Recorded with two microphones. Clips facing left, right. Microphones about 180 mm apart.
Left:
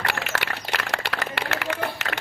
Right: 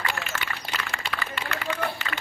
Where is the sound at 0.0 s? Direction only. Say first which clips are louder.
Left 3 dB; 75° left (ahead or behind).